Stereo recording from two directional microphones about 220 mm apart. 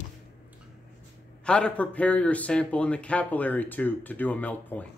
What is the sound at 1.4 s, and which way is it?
A man's voice, 5° left (ahead or behind).